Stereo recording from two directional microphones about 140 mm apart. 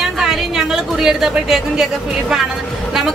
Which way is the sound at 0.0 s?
5° right (ahead or behind).